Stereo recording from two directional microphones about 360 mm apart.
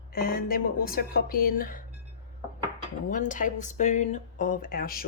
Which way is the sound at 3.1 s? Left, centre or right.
Left.